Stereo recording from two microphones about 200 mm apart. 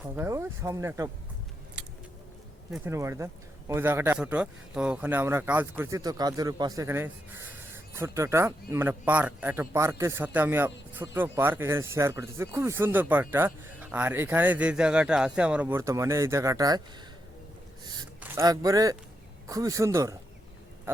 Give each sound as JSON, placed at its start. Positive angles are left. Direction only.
{"t": 0.2, "sound": "speech", "side_deg": -10}
{"t": 1.8, "sound": "vehicle", "side_deg": -5}
{"t": 2.7, "sound": "speech", "side_deg": -10}
{"t": 18.2, "sound": "speech", "side_deg": -15}